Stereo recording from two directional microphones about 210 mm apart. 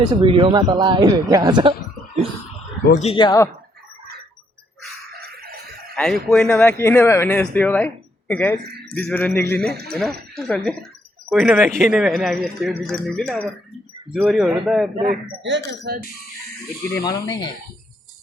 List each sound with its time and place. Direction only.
0.2 s a man's voice: 25° right (ahead or behind)
2.8 s speech: 35° left (ahead or behind); by 3.5 s 15° left (ahead or behind)
6.0 s speech: centre (ahead or behind)
14.9 s a man's voice: 30° right (ahead or behind)
15.4 s speech: 55° right (ahead or behind)
16.9 s speech: 15° left (ahead or behind)